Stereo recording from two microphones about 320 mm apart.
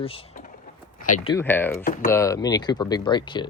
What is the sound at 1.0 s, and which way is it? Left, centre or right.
Speech, left.